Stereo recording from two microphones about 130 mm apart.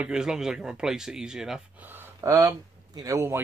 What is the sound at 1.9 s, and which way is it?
A man's voice, 15° right (ahead or behind).